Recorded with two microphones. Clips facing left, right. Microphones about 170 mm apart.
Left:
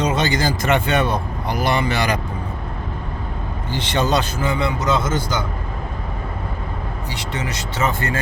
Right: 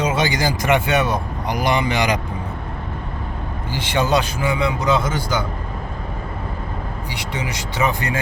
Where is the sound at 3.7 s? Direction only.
10° right (ahead or behind).